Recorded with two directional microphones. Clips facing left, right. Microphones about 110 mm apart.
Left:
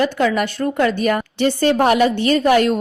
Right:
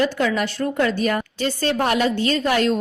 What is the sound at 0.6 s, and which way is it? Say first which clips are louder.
Speech: left 3 dB; 30° left (ahead or behind).